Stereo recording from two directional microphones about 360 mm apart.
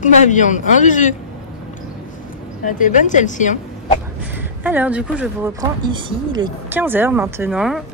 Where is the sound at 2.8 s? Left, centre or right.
Left.